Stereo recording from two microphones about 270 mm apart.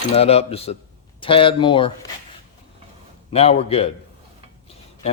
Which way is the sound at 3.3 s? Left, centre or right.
Left.